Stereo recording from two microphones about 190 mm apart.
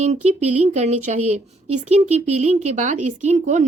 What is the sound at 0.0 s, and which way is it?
A woman's voice, 35° right (ahead or behind).